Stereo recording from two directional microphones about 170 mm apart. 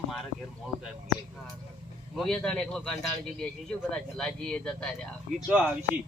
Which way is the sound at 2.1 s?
Centre (ahead or behind).